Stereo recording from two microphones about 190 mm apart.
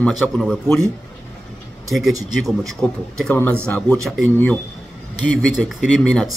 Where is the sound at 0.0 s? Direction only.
Centre (ahead or behind).